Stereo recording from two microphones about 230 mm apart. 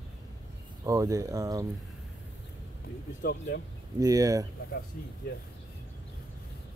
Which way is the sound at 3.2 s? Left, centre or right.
Left.